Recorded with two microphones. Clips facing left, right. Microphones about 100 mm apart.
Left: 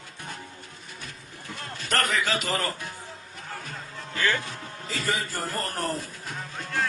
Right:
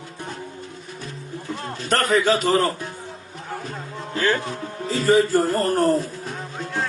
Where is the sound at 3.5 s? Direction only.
20° right (ahead or behind).